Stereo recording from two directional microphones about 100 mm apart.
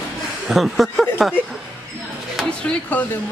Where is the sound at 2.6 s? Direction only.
15° left (ahead or behind).